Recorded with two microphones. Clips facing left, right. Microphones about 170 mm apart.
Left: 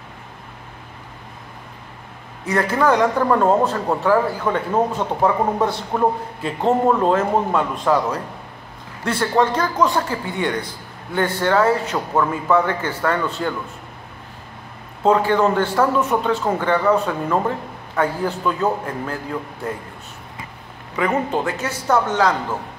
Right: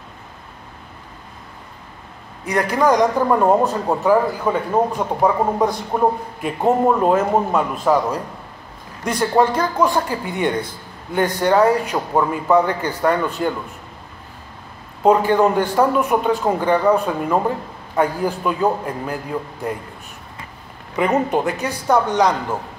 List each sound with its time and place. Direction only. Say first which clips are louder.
2.4 s a man's voice: right 1 dB; 15° right (ahead or behind)
15.0 s a man's voice: right 2 dB; 15° right (ahead or behind)
20.9 s a man's voice: right 3 dB; 20° right (ahead or behind)